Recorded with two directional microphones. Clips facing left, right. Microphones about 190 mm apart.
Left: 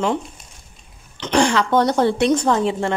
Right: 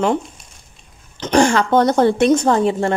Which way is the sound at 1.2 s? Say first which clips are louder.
Right 3 dB; 45° right (ahead or behind).